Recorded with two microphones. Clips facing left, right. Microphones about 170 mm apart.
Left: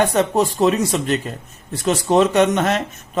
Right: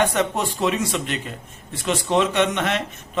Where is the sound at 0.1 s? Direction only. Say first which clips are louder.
Left 5 dB; 35° left (ahead or behind).